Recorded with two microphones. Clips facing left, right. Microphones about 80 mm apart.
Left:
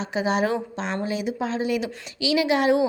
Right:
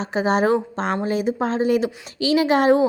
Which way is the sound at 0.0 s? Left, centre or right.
Right.